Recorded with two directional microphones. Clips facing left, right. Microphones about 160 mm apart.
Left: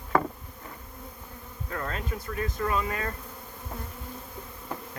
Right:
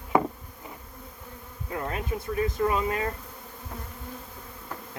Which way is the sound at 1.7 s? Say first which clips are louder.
Right 3 dB; 20° right (ahead or behind).